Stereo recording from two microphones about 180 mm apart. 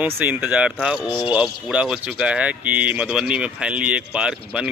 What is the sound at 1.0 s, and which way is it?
Speech, 25° left (ahead or behind).